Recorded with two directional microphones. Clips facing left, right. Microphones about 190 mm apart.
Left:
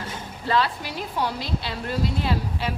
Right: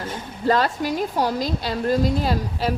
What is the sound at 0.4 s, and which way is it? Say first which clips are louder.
A woman's voice: right 4 dB; 45° right (ahead or behind).